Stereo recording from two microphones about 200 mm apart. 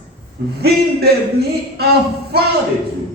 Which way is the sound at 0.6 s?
55° right (ahead or behind).